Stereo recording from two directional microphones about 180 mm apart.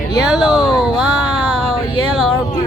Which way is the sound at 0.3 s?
5° right (ahead or behind).